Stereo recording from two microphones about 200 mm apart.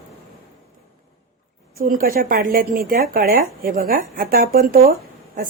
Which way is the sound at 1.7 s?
45° right (ahead or behind).